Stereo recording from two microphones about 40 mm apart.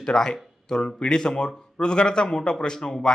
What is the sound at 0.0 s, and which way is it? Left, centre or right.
A man's voice, centre.